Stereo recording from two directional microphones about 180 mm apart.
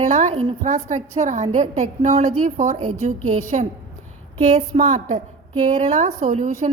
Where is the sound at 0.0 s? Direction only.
40° right (ahead or behind).